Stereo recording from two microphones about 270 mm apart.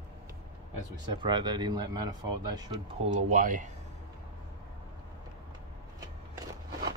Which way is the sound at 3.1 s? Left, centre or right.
Right.